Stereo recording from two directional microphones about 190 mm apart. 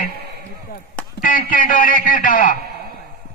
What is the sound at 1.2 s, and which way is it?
A man's voice, 45° left (ahead or behind).